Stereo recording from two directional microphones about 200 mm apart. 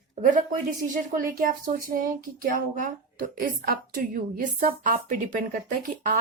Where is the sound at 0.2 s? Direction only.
40° right (ahead or behind).